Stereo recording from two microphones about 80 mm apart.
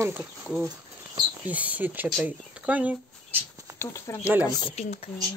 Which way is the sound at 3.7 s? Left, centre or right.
Left.